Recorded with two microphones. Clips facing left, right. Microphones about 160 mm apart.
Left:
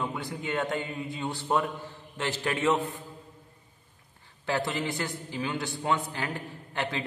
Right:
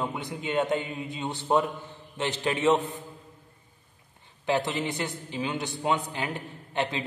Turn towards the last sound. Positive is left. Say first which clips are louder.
# right 3 dB
turn(degrees=-20)  # may be behind; listen again after turning